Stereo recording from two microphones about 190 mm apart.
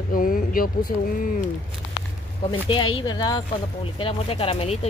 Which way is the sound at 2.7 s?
25° left (ahead or behind).